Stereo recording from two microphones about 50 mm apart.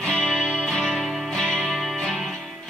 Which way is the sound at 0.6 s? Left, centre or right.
Centre.